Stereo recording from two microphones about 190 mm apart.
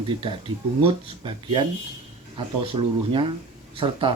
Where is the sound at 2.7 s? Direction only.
25° right (ahead or behind).